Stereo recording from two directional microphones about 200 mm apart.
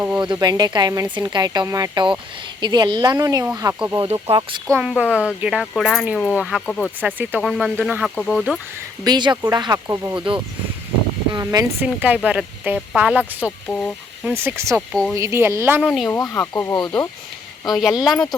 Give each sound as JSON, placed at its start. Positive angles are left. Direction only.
{"t": 0.0, "sound": "speech", "side_deg": -10}
{"t": 0.3, "sound": "speech", "side_deg": -20}
{"t": 4.0, "sound": "speech", "side_deg": -25}
{"t": 4.7, "sound": "speech", "side_deg": -5}
{"t": 7.0, "sound": "speech", "side_deg": -10}
{"t": 9.0, "sound": "speech", "side_deg": -20}
{"t": 11.3, "sound": "speech", "side_deg": -15}
{"t": 13.7, "sound": "speech", "side_deg": 5}
{"t": 14.3, "sound": "speech", "side_deg": -10}
{"t": 14.8, "sound": "speech", "side_deg": 0}
{"t": 15.1, "sound": "speech", "side_deg": -15}
{"t": 15.8, "sound": "speech", "side_deg": 5}
{"t": 17.7, "sound": "speech", "side_deg": 0}